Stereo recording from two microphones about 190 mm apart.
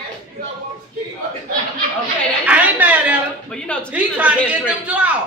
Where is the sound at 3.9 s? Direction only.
5° right (ahead or behind).